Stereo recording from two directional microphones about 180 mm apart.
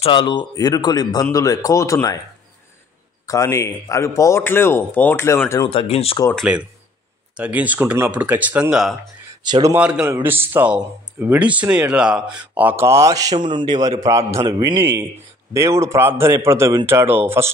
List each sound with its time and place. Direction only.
0.0 s speech: 25° left (ahead or behind)
3.3 s a man's voice: 15° left (ahead or behind)
5.7 s speech: 35° left (ahead or behind)
6.3 s speech: 5° right (ahead or behind)
9.4 s a man's voice: 25° right (ahead or behind)
9.7 s speech: 5° right (ahead or behind)